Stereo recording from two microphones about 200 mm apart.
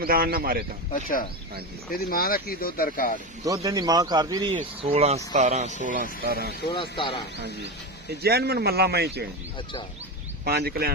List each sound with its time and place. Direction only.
0.0 s speech: 50° right (ahead or behind)
0.9 s speech: 45° left (ahead or behind)
3.4 s speech: 15° right (ahead or behind)
4.5 s speech: 30° right (ahead or behind); by 6.5 s 50° right (ahead or behind)
6.9 s speech: 25° left (ahead or behind)
8.2 s speech: 50° right (ahead or behind)
10.4 s speech: 50° right (ahead or behind)